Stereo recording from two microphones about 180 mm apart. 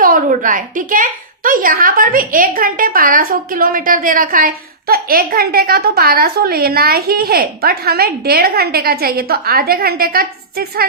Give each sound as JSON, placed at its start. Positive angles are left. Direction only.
{"t": 0.0, "sound": "a woman's voice", "side_deg": -50}